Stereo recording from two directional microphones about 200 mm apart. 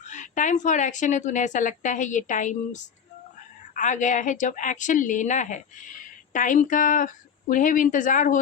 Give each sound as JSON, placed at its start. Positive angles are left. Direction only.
{"t": 0.1, "sound": "a woman's voice", "side_deg": 40}